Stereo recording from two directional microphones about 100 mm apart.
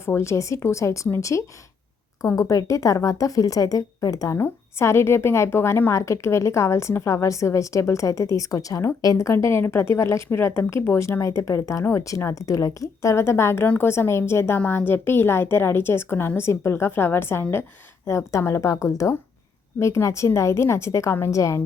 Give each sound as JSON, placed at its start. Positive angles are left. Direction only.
{"t": 0.0, "sound": "a woman's voice", "side_deg": 25}
{"t": 4.4, "sound": "speech", "side_deg": 25}